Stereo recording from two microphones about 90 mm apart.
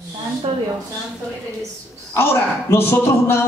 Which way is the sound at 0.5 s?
60° right (ahead or behind).